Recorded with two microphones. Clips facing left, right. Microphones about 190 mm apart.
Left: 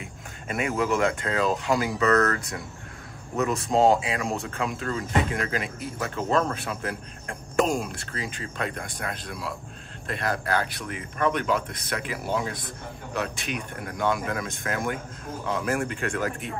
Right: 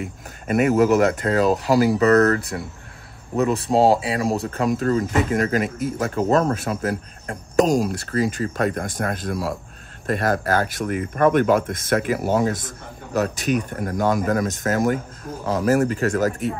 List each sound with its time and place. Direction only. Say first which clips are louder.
0.0 s speech: right 8 dB; 45° right (ahead or behind)